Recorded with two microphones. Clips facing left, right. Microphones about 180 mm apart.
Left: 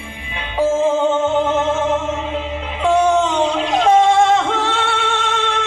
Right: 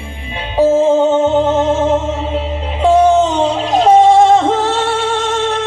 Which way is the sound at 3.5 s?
35° right (ahead or behind).